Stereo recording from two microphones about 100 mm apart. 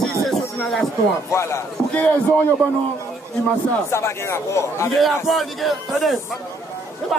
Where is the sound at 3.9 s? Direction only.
25° left (ahead or behind).